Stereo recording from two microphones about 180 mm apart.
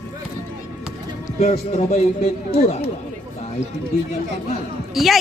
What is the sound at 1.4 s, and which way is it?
Speech, 35° left (ahead or behind).